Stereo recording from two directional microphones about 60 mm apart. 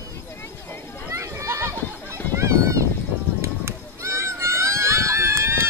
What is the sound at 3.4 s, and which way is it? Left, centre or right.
Run, right.